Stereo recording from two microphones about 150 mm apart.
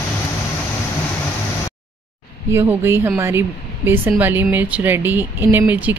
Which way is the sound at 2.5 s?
15° right (ahead or behind).